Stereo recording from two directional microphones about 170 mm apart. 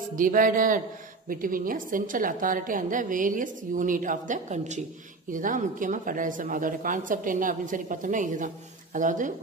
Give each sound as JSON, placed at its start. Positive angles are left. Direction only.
{"t": 0.1, "sound": "a woman's voice", "side_deg": -50}